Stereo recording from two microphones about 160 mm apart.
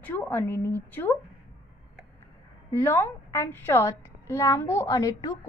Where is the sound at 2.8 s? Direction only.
15° left (ahead or behind).